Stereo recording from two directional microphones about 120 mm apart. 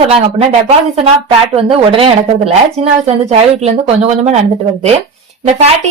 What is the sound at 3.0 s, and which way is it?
Speech, 65° right (ahead or behind).